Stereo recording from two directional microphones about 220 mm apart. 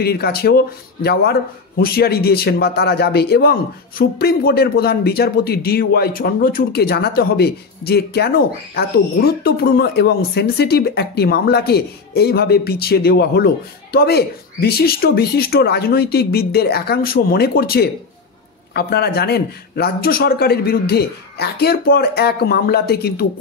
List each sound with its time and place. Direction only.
0.0 s speech: 45° left (ahead or behind)